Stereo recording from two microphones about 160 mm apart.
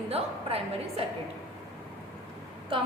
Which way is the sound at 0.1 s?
40° right (ahead or behind).